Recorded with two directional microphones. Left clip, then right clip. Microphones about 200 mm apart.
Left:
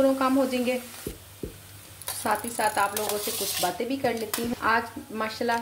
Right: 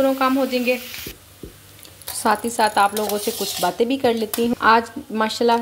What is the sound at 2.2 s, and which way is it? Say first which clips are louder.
Speech: right 8 dB; 40° right (ahead or behind).